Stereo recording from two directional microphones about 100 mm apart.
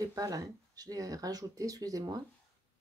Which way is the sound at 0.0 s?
35° right (ahead or behind).